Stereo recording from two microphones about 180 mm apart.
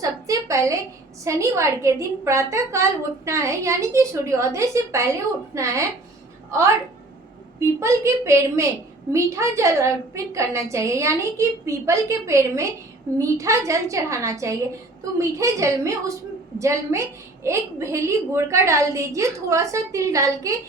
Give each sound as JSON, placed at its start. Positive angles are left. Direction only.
{"t": 0.0, "sound": "a sound", "side_deg": -20}
{"t": 1.2, "sound": "a woman's voice", "side_deg": -15}
{"t": 7.6, "sound": "a woman's voice", "side_deg": -15}